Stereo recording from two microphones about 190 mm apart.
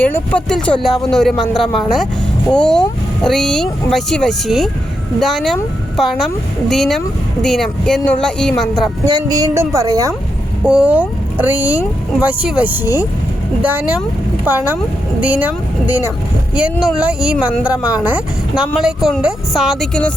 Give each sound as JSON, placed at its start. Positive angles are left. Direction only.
{"t": 0.0, "sound": "speech", "side_deg": 5}
{"t": 9.0, "sound": "a woman's voice", "side_deg": -20}
{"t": 10.6, "sound": "speech", "side_deg": -5}